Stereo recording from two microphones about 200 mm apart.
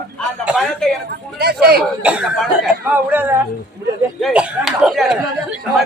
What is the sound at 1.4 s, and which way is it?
Speech, 50° right (ahead or behind).